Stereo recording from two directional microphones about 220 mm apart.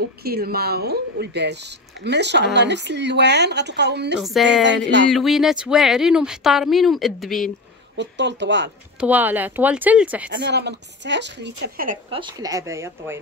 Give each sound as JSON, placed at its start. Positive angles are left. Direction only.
{"t": 0.2, "sound": "speech", "side_deg": -45}
{"t": 4.2, "sound": "speech", "side_deg": 0}
{"t": 4.6, "sound": "speech", "side_deg": -55}
{"t": 5.1, "sound": "speech", "side_deg": 0}
{"t": 8.0, "sound": "speech", "side_deg": -55}
{"t": 9.0, "sound": "speech", "side_deg": -10}
{"t": 10.3, "sound": "speech", "side_deg": -50}
{"t": 12.1, "sound": "speech", "side_deg": -20}